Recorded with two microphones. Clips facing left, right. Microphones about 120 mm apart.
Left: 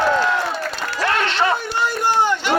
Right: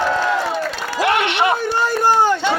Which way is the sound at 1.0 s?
15° right (ahead or behind).